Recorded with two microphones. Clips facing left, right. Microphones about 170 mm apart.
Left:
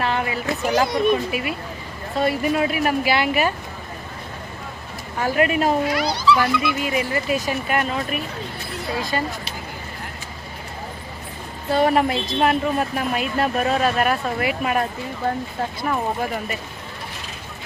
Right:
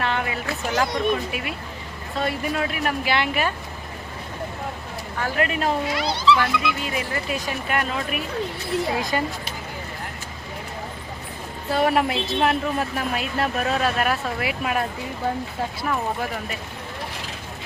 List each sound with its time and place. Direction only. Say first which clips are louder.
0.0 s a sound: left 2 dB; 5° left (ahead or behind)
0.8 s speech: left 3 dB; 10° left (ahead or behind)
5.2 s speech: left 5 dB; 10° left (ahead or behind)
5.9 s a child's voice: left 1 dB; 25° right (ahead or behind)
6.3 s speech: left 2 dB; 10° left (ahead or behind)
9.0 s a child's voice: even; 20° right (ahead or behind)
11.7 s speech: left 3 dB; 5° right (ahead or behind)
15.9 s speech: left 3 dB; centre (ahead or behind)